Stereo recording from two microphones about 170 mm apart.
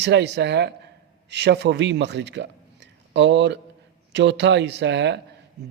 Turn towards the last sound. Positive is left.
turn(degrees=-90)